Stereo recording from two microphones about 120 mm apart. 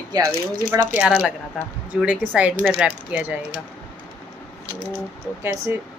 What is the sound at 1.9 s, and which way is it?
Speech, 15° right (ahead or behind).